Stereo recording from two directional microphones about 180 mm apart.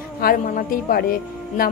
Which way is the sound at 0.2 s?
55° left (ahead or behind).